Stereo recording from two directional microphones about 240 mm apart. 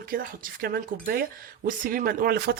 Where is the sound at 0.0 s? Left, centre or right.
Right.